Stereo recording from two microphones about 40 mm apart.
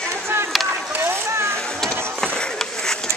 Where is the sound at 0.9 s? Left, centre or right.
Right.